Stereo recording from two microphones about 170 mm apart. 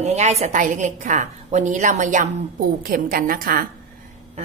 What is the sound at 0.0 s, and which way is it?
A woman's voice, 40° right (ahead or behind).